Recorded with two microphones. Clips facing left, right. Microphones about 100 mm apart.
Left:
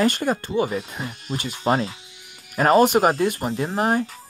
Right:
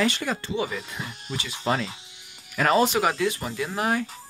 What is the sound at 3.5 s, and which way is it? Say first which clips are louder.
Speech: left 4 dB; 35° left (ahead or behind).